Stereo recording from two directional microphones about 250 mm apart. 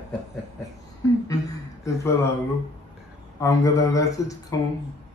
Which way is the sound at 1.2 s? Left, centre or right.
Centre.